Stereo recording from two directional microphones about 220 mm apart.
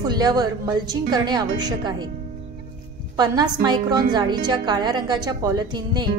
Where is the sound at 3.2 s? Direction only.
20° right (ahead or behind).